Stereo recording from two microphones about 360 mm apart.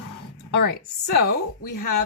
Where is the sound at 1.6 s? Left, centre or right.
Left.